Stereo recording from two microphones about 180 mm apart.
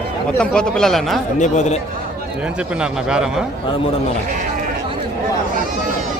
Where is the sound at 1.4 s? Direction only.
40° left (ahead or behind).